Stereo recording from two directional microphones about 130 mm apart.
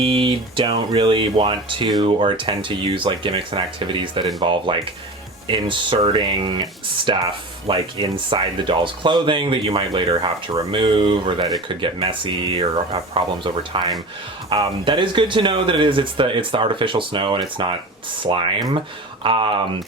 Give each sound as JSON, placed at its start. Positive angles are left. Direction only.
{"t": 0.0, "sound": "speech", "side_deg": -40}